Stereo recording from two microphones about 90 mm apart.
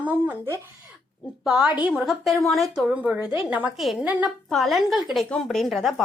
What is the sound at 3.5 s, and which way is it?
Speech, 15° right (ahead or behind).